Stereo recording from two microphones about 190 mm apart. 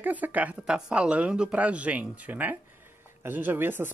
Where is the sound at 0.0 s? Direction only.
10° right (ahead or behind).